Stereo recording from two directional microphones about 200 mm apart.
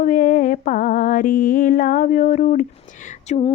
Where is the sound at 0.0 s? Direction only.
40° left (ahead or behind).